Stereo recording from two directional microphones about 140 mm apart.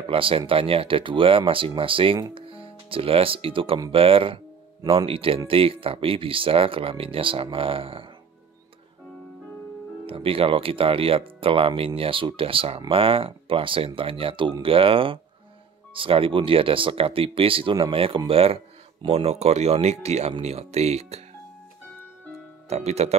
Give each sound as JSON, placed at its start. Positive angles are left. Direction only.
{"t": 0.1, "sound": "speech", "side_deg": -40}
{"t": 10.0, "sound": "speech", "side_deg": -40}
{"t": 22.7, "sound": "speech", "side_deg": -50}